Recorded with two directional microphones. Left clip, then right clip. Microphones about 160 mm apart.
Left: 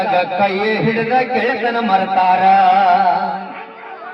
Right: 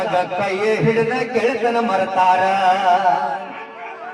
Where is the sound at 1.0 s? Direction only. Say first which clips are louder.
Left 3 dB; 25° left (ahead or behind).